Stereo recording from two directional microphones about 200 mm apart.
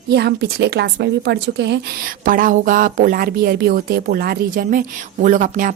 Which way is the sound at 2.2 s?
45° right (ahead or behind).